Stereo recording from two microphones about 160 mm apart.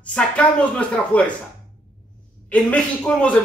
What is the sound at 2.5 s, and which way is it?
Speech, 10° left (ahead or behind).